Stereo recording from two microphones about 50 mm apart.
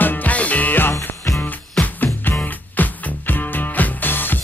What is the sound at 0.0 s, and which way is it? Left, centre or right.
Music, left.